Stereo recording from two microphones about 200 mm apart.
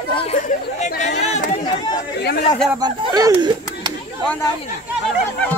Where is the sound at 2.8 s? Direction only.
20° right (ahead or behind).